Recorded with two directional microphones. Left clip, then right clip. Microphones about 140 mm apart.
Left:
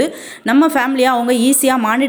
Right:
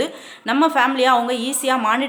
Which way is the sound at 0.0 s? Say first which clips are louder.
Left 6 dB; 30° left (ahead or behind).